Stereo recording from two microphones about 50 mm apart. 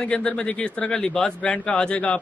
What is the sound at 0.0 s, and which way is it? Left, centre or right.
A man's voice, left.